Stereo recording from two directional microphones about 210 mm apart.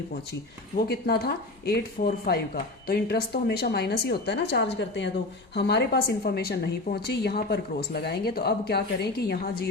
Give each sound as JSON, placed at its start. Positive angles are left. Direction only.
{"t": 0.9, "sound": "a woman's voice", "side_deg": 50}